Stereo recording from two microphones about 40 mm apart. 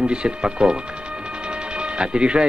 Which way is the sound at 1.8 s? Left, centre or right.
Right.